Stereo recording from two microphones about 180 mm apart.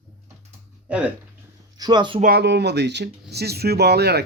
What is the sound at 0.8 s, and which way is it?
Speech, 5° right (ahead or behind).